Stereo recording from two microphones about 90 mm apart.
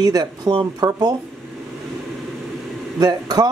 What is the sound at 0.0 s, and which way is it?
Speech, 50° right (ahead or behind).